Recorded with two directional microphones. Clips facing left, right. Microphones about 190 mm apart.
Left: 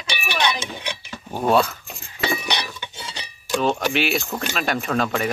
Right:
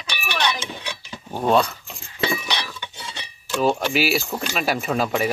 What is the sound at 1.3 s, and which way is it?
Speech, 5° left (ahead or behind).